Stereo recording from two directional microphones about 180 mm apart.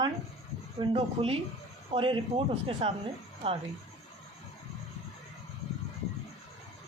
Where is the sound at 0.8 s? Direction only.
30° right (ahead or behind).